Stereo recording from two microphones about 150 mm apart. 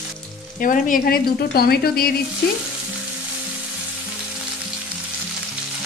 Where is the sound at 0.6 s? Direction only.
65° left (ahead or behind); by 2.1 s 90° left.